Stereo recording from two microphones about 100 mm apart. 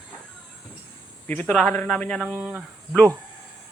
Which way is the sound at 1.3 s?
15° left (ahead or behind).